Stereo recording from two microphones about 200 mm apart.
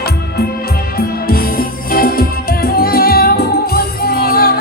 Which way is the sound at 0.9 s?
50° left (ahead or behind).